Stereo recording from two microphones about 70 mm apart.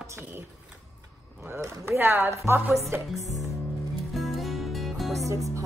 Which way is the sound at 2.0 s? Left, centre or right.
Right.